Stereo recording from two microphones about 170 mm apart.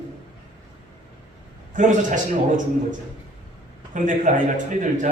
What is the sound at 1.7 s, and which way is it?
Speech, 50° right (ahead or behind).